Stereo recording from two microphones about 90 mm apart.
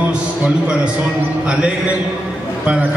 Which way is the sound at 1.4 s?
10° right (ahead or behind).